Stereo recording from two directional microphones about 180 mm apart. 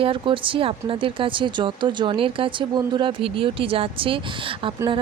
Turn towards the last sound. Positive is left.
turn(degrees=-30)  # may be behind; listen again after turning